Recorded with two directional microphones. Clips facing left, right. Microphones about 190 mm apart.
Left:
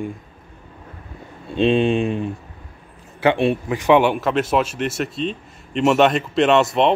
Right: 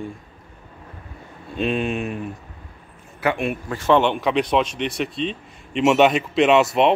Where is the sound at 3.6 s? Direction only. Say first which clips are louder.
Left 1 dB; 15° left (ahead or behind); by 6.9 s centre (ahead or behind).